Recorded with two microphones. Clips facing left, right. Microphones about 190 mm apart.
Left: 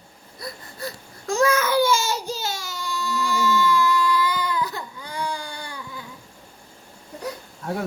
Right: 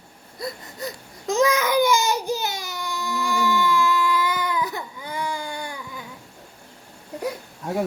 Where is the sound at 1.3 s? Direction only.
15° right (ahead or behind).